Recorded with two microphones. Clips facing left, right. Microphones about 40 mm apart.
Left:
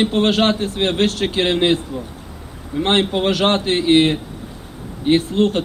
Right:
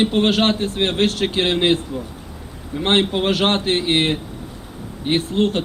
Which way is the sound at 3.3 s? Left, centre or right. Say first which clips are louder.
Left 2 dB; right.